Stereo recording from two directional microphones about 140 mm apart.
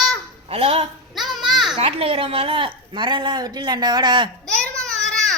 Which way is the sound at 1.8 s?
45° right (ahead or behind).